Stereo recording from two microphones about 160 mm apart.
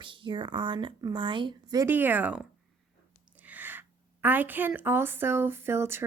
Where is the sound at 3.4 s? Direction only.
10° right (ahead or behind).